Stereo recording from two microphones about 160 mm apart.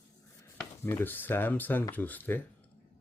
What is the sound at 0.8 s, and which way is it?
Speech, 15° left (ahead or behind).